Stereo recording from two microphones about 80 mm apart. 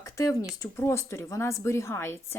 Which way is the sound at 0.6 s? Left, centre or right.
Left.